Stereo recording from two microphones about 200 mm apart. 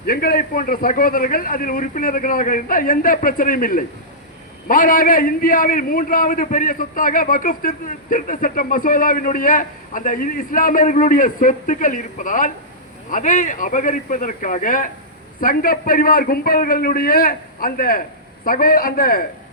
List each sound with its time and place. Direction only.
0.0 s a man's voice: 50° left (ahead or behind)